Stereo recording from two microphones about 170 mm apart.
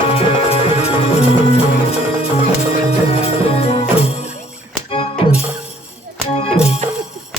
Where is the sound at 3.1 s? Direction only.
35° left (ahead or behind).